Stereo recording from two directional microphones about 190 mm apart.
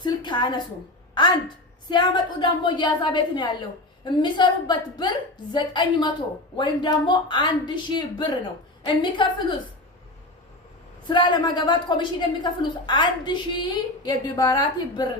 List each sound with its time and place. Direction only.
0.0 s a sound: 25° left (ahead or behind)
1.1 s a woman's voice: 25° left (ahead or behind)
11.1 s a woman's voice: 25° left (ahead or behind)